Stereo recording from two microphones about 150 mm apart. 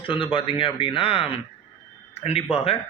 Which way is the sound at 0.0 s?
35° left (ahead or behind).